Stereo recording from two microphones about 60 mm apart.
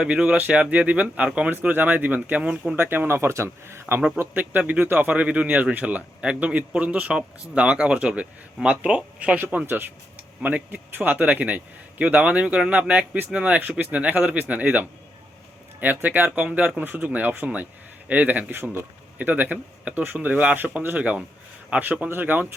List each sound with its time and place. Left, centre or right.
0.0 s a man's voice: centre
1.5 s speech: right
2.4 s a man's voice: centre
2.7 s speech: right
4.2 s a man's voice: right
18.6 s a man's voice: right